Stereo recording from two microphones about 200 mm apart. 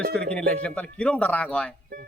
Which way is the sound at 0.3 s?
5° left (ahead or behind).